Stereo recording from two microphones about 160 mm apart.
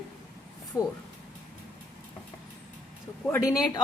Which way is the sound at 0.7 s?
20° left (ahead or behind).